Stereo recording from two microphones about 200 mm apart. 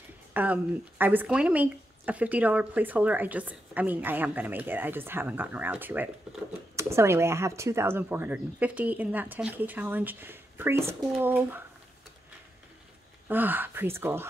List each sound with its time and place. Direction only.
0.3 s speech: 10° right (ahead or behind)
13.3 s speech: 10° right (ahead or behind)